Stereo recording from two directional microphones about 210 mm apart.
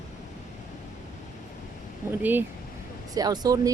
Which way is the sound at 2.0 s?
10° right (ahead or behind).